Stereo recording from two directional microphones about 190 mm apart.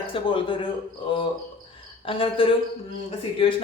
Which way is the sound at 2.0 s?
30° left (ahead or behind).